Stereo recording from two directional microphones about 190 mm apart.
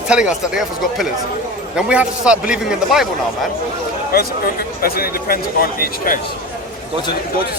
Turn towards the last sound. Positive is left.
turn(degrees=50)  # may be behind; listen again after turning